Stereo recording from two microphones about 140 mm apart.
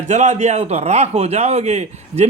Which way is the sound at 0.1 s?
55° right (ahead or behind).